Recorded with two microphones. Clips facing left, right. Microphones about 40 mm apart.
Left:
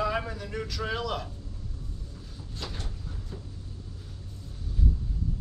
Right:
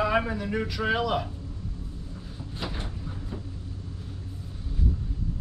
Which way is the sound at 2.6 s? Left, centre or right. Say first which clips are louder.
Right 4 dB; centre.